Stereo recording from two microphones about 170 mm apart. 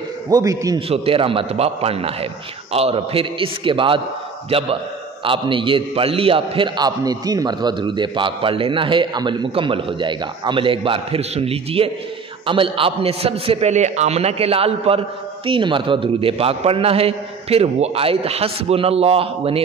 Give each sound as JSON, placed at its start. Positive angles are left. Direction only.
{"t": 0.3, "sound": "a man's voice", "side_deg": -20}
{"t": 0.7, "sound": "a man's voice", "side_deg": -35}